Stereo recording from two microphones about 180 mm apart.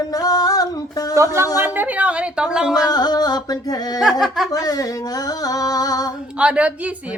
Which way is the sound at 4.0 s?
Centre (ahead or behind).